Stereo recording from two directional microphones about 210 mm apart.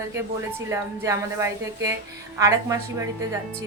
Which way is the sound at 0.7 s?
15° right (ahead or behind).